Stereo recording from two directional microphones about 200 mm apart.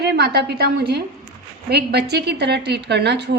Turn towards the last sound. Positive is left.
turn(degrees=-55)  # may be behind; listen again after turning